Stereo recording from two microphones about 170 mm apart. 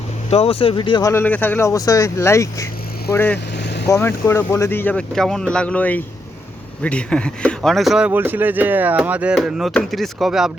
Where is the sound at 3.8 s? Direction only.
15° left (ahead or behind).